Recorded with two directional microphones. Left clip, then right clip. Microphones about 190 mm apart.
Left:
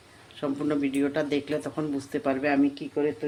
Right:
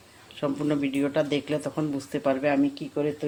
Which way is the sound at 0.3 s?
10° right (ahead or behind).